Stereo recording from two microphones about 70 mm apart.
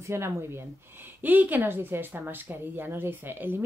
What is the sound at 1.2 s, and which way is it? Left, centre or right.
Speech, right.